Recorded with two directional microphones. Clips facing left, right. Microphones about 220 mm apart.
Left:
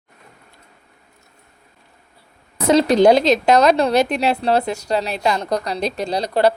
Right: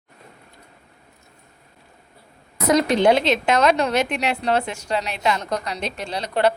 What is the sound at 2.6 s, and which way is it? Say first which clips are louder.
A woman's voice: left 4 dB; 30° left (ahead or behind).